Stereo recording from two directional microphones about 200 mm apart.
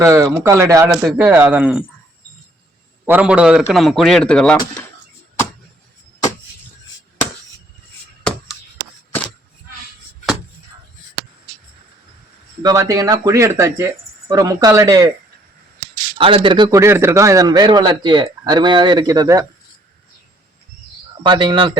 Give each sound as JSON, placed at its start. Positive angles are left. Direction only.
{"t": 0.0, "sound": "speech", "side_deg": -15}
{"t": 3.1, "sound": "a man's voice", "side_deg": -5}
{"t": 12.6, "sound": "speech", "side_deg": -15}
{"t": 16.1, "sound": "a man's voice", "side_deg": -25}
{"t": 21.2, "sound": "a man's voice", "side_deg": -25}